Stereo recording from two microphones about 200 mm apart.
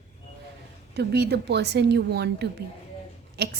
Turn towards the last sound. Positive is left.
turn(degrees=-55)  # may be behind; listen again after turning